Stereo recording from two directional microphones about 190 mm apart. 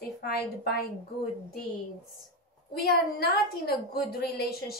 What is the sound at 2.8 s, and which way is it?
A woman's voice, 55° left (ahead or behind).